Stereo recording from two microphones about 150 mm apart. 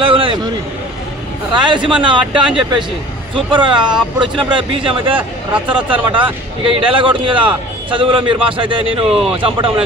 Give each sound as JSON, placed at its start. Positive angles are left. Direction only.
{"t": 0.0, "sound": "vehicle", "side_deg": -35}
{"t": 1.5, "sound": "a man's voice", "side_deg": -30}